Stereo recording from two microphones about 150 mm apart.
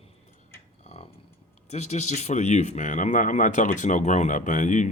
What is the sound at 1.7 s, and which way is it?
A man's voice, 50° left (ahead or behind).